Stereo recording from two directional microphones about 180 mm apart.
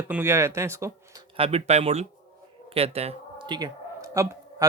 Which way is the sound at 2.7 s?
30° right (ahead or behind).